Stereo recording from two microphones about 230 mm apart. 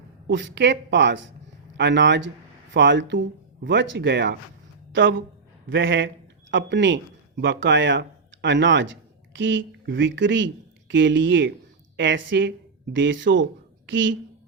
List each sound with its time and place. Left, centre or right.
0.3 s a woman's voice: right